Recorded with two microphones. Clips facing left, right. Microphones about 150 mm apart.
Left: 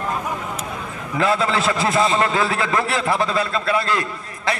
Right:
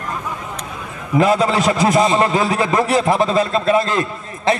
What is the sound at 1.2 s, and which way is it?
A man's voice, 15° right (ahead or behind).